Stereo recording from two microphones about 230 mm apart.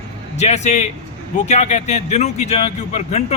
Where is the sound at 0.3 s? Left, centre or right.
Left.